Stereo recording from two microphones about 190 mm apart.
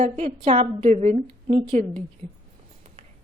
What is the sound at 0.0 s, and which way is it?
A woman's voice, 35° right (ahead or behind).